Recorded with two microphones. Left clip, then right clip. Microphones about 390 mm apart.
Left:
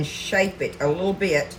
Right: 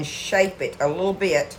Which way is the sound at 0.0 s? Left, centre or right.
Centre.